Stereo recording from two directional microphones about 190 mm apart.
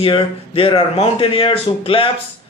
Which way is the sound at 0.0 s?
30° left (ahead or behind).